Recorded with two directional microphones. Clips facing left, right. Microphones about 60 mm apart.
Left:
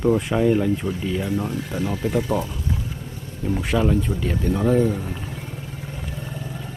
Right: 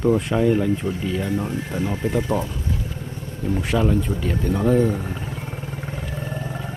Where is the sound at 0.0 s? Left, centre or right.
Centre.